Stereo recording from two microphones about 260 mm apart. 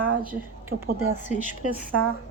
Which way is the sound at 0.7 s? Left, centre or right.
Right.